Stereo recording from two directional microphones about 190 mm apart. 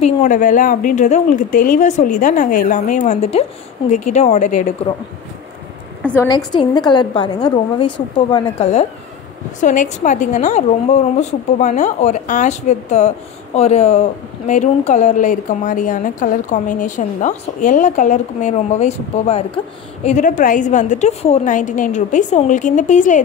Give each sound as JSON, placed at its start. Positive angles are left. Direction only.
{"t": 0.0, "sound": "a woman's voice", "side_deg": 40}
{"t": 3.0, "sound": "a woman's voice", "side_deg": 35}
{"t": 6.2, "sound": "a woman's voice", "side_deg": 20}